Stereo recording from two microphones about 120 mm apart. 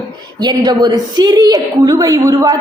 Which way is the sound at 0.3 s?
35° right (ahead or behind).